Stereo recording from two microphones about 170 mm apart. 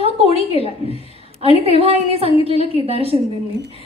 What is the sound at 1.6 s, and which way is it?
A woman's voice, 35° right (ahead or behind).